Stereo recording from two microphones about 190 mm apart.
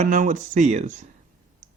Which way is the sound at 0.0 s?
40° right (ahead or behind).